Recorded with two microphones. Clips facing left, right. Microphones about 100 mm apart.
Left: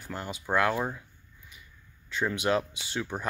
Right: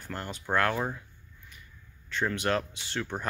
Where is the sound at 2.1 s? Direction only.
10° left (ahead or behind).